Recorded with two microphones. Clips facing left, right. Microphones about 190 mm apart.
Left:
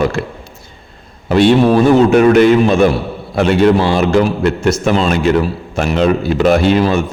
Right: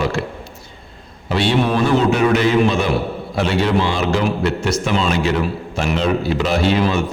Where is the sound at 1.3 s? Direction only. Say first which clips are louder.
Left 8 dB; 50° left (ahead or behind).